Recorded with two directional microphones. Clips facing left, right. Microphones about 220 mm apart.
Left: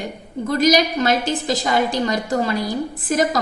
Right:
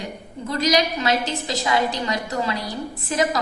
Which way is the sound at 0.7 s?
50° left (ahead or behind).